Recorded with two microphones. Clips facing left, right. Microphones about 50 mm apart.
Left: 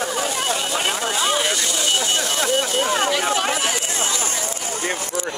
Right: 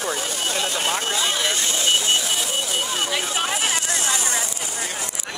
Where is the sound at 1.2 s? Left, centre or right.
Left.